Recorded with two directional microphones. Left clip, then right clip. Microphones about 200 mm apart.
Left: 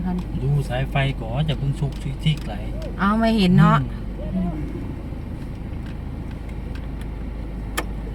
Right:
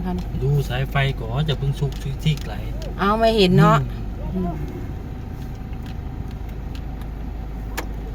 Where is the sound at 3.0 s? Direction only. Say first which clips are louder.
Right 4 dB; 25° right (ahead or behind).